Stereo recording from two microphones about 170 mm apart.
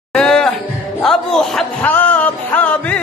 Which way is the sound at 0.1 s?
5° left (ahead or behind).